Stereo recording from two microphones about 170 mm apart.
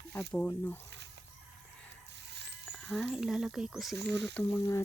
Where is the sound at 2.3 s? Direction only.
90° right.